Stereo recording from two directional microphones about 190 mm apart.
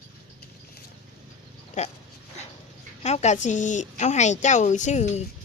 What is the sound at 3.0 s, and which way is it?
A woman's voice, 35° left (ahead or behind).